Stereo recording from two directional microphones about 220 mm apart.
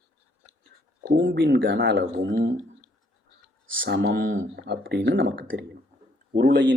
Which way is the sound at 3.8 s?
50° right (ahead or behind).